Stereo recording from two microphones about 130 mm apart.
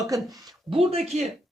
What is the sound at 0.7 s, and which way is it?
Speech, 50° right (ahead or behind).